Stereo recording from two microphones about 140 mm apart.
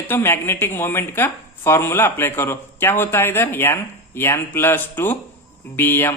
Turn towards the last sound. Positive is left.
turn(degrees=15)  # may be behind; listen again after turning